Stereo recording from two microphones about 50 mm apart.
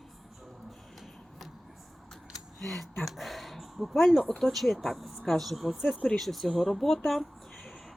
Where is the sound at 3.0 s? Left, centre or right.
Centre.